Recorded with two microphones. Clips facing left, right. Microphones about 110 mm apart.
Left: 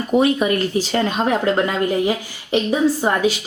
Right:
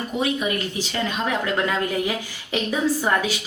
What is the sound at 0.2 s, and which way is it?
Speech, 45° left (ahead or behind).